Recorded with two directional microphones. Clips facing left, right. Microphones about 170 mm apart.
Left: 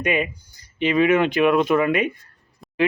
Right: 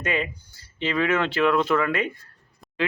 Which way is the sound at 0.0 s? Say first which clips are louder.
Left 4 dB; 15° left (ahead or behind).